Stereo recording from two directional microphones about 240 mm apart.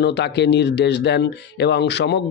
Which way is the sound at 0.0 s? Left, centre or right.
Left.